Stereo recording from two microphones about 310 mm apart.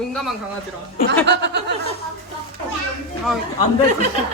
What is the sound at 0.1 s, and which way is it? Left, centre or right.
Bird, centre.